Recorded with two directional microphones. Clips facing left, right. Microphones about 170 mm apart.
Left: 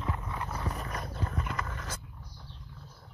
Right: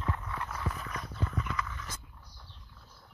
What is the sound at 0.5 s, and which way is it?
Horse, 40° left (ahead or behind).